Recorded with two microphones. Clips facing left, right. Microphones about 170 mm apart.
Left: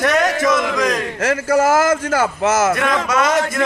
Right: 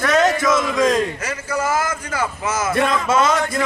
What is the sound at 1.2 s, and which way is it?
A man's voice, 90° left.